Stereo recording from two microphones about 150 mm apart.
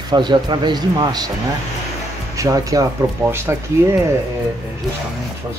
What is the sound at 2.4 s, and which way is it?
Speech, 20° right (ahead or behind).